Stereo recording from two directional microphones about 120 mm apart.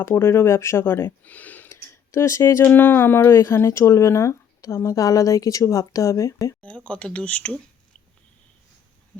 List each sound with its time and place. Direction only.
0.0 s speech: 20° left (ahead or behind)
1.7 s speech: 25° left (ahead or behind)
6.6 s speech: 10° left (ahead or behind)